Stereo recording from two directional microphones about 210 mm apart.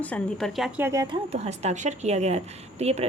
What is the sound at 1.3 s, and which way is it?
A woman's voice, 30° right (ahead or behind).